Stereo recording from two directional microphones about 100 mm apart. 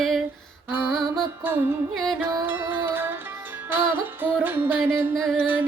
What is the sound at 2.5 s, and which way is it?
Music, 25° right (ahead or behind).